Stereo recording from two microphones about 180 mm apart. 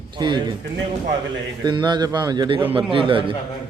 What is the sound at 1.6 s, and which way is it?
A man's voice, 25° right (ahead or behind).